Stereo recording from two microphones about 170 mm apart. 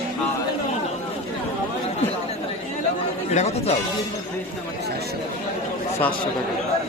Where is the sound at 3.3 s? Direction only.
40° left (ahead or behind).